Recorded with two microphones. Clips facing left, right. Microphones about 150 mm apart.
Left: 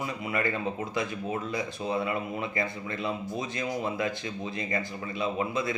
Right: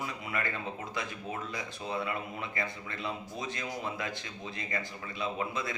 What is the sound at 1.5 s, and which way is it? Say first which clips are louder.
Speech: left 6 dB; 15° left (ahead or behind).